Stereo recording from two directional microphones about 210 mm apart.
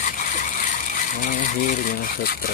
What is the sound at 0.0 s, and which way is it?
Speech, 40° left (ahead or behind).